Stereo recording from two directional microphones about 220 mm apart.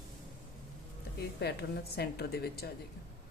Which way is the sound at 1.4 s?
45° left (ahead or behind).